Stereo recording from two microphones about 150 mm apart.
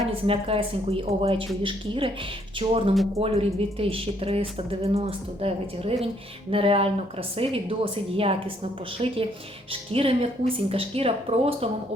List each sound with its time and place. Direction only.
0.3 s speech: 40° right (ahead or behind)